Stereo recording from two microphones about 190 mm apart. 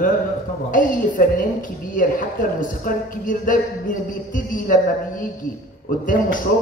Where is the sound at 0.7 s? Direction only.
45° left (ahead or behind).